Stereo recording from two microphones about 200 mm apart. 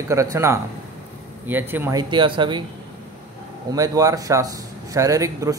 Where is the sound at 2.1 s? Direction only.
25° right (ahead or behind).